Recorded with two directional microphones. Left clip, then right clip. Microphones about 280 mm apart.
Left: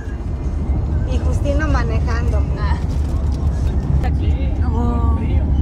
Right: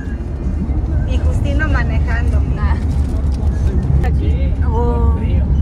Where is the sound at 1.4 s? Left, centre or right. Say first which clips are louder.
Even; centre.